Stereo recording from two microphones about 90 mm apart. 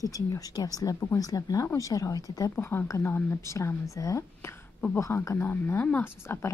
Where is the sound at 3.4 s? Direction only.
35° left (ahead or behind).